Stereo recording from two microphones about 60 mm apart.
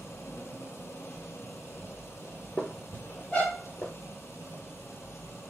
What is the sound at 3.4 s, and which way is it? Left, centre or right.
Vehicle, centre.